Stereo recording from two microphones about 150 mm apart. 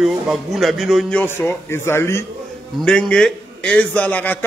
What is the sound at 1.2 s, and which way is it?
A man's voice, 15° left (ahead or behind).